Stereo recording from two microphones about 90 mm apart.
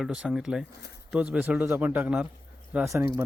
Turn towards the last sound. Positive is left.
turn(degrees=-30)  # may be behind; listen again after turning